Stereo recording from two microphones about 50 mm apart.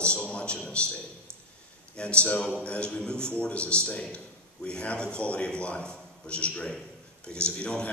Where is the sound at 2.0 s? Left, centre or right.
Left.